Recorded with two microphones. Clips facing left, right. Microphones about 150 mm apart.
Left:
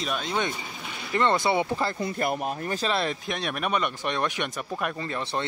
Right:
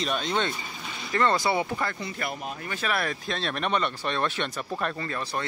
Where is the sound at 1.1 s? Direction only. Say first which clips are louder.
Left 1 dB; 20° left (ahead or behind).